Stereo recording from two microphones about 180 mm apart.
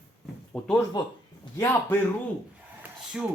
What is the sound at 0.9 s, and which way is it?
A man's voice, 25° left (ahead or behind).